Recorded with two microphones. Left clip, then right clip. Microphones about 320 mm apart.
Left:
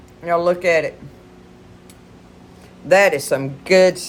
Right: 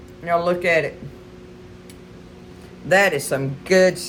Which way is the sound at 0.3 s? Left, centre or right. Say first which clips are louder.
Left 2 dB; centre.